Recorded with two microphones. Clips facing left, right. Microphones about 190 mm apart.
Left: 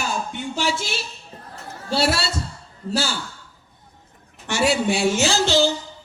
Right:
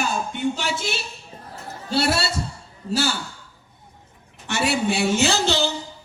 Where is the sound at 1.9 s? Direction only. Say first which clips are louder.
Even; 60° right (ahead or behind).